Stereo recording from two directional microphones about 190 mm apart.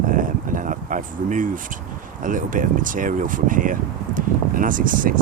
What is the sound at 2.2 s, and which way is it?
Speech, 45° right (ahead or behind).